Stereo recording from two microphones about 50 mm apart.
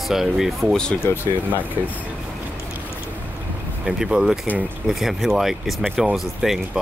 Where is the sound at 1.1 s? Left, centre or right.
Left.